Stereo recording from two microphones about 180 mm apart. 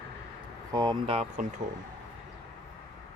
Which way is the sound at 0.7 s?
20° right (ahead or behind).